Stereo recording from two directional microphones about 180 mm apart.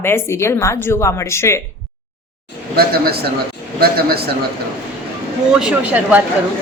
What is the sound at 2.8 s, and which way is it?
Speech, 60° right (ahead or behind).